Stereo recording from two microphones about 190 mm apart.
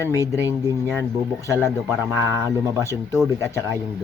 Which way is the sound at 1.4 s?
15° left (ahead or behind).